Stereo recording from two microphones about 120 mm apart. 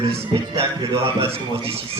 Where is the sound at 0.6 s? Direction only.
55° right (ahead or behind).